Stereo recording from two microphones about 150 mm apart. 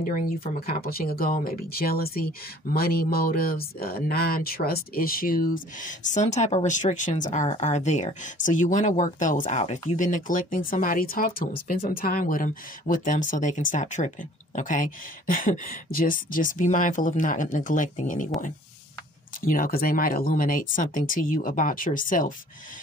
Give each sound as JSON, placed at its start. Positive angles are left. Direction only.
{"t": 0.0, "sound": "speech", "side_deg": 75}
{"t": 19.4, "sound": "speech", "side_deg": 70}